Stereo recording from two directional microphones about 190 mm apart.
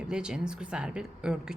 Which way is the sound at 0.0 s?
5° right (ahead or behind).